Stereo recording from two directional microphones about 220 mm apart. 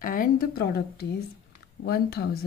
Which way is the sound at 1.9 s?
45° left (ahead or behind).